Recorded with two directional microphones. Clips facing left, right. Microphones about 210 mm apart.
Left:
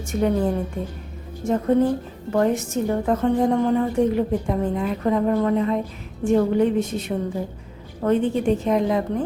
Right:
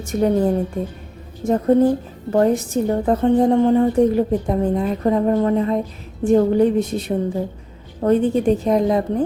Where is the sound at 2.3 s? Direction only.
35° right (ahead or behind).